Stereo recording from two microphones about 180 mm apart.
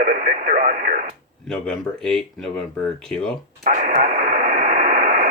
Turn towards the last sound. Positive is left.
turn(degrees=-45)  # may be behind; listen again after turning